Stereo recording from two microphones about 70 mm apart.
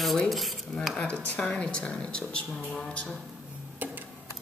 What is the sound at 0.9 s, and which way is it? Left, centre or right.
Speech, centre.